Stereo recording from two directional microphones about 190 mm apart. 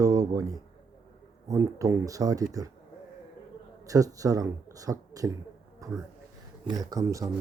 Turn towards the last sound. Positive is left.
turn(degrees=-20)  # may be behind; listen again after turning